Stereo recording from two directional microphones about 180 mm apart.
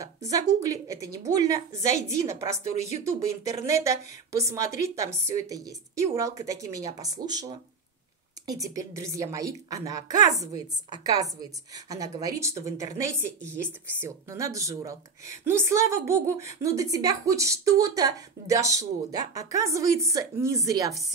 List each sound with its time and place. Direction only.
0.0 s a woman's voice: 20° right (ahead or behind)